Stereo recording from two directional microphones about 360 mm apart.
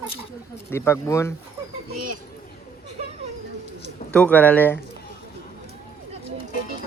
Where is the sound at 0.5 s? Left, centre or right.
Centre.